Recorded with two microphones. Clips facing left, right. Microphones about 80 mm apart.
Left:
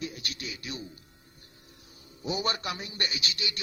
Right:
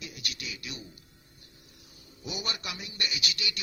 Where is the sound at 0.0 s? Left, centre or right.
Left.